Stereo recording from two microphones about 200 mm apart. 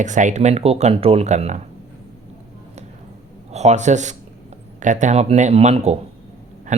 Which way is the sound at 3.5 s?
35° right (ahead or behind).